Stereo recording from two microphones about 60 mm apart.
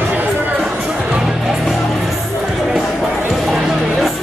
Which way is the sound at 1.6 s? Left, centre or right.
Centre.